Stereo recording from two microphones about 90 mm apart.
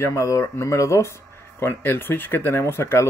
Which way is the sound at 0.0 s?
35° left (ahead or behind).